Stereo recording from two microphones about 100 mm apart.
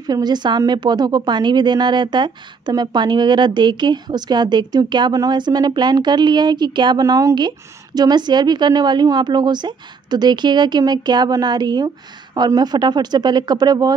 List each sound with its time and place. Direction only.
0.0 s a woman's voice: 45° right (ahead or behind)